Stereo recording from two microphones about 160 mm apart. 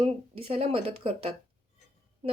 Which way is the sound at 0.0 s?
35° right (ahead or behind).